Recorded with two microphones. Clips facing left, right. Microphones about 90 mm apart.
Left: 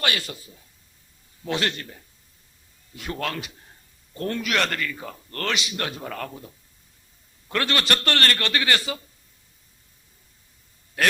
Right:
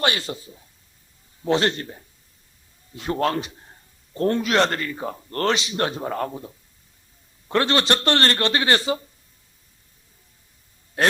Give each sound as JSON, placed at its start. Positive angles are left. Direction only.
{"t": 0.0, "sound": "a man's voice", "side_deg": -30}
{"t": 11.0, "sound": "a man's voice", "side_deg": -30}